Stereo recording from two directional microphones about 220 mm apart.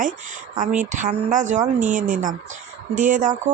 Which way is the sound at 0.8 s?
35° right (ahead or behind).